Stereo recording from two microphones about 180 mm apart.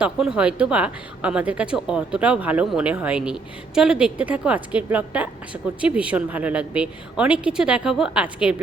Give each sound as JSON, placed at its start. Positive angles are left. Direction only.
{"t": 0.0, "sound": "a woman's voice", "side_deg": -5}